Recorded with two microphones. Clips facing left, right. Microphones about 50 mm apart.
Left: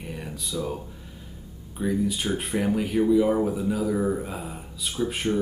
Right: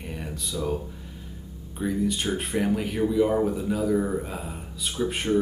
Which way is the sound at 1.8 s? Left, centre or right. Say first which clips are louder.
Left 1 dB; centre.